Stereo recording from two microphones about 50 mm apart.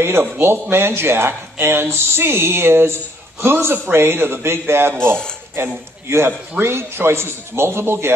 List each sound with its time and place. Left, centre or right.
0.0 s speech: right
4.9 s speech: centre
5.6 s a man's voice: right